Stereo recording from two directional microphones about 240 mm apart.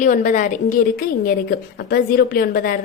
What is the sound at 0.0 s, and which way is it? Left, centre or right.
A woman's voice, left.